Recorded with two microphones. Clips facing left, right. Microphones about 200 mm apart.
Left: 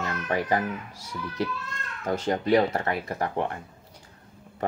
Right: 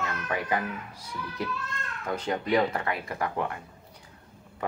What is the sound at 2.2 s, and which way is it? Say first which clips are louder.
Speech: left 3 dB; 40° left (ahead or behind).